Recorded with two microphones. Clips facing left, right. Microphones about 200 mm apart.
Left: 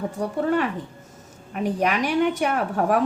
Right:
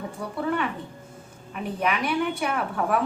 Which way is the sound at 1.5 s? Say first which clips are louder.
Left 4 dB; 45° left (ahead or behind).